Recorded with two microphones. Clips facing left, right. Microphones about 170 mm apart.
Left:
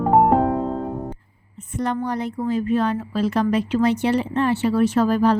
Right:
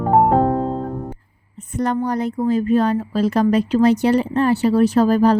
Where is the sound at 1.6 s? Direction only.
40° right (ahead or behind).